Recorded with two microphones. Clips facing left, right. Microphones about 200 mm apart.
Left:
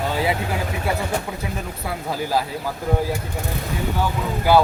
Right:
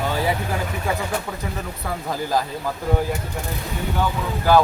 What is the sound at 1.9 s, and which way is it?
Speech, 10° left (ahead or behind).